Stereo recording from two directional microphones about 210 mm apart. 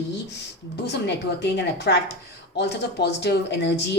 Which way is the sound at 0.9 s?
55° left (ahead or behind).